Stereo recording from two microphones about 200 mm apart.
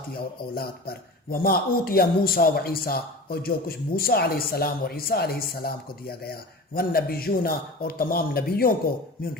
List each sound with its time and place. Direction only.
0.1 s speech: 50° left (ahead or behind)